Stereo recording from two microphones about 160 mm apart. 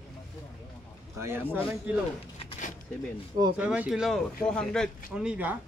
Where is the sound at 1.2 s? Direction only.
15° right (ahead or behind).